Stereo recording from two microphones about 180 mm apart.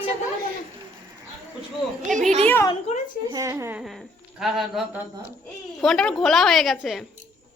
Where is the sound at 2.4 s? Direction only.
15° left (ahead or behind).